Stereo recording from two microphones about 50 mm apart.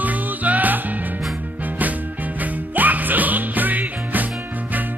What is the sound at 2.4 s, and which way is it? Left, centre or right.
Music, right.